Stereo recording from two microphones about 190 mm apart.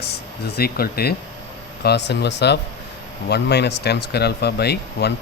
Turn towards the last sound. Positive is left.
turn(degrees=60)  # may be behind; listen again after turning